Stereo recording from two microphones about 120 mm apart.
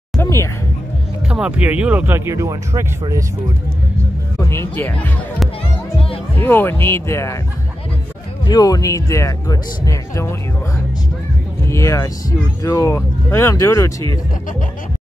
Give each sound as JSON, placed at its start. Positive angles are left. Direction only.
{"t": 0.2, "sound": "music", "side_deg": 25}
{"t": 1.3, "sound": "speech", "side_deg": -10}
{"t": 4.4, "sound": "speech", "side_deg": 20}
{"t": 6.3, "sound": "speech", "side_deg": 15}
{"t": 8.5, "sound": "speech", "side_deg": 30}
{"t": 11.6, "sound": "speech", "side_deg": 25}